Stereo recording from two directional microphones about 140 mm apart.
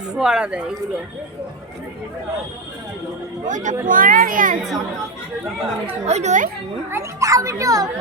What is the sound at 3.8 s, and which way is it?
Speech, 80° right.